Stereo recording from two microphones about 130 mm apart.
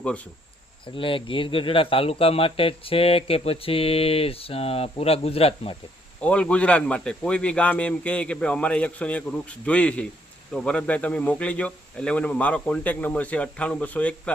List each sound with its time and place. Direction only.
0.9 s speech: 40° left (ahead or behind)
6.2 s a man's voice: 10° left (ahead or behind)